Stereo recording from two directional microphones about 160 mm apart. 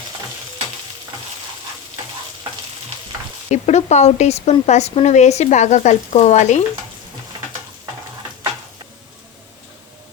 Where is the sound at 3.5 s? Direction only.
45° left (ahead or behind).